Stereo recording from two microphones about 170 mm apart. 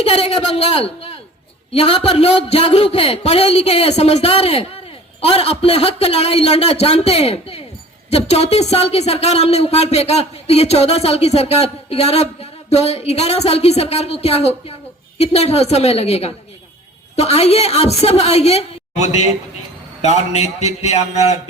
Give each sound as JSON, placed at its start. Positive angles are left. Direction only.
{"t": 0.0, "sound": "a man's voice", "side_deg": 35}